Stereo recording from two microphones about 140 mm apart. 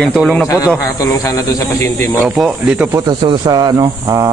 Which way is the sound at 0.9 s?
25° left (ahead or behind).